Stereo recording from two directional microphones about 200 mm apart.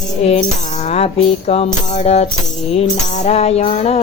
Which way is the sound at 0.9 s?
30° left (ahead or behind).